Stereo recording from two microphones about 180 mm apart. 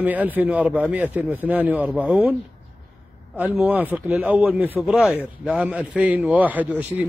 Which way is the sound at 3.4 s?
10° right (ahead or behind).